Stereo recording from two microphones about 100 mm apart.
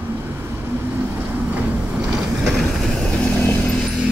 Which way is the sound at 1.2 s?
15° right (ahead or behind).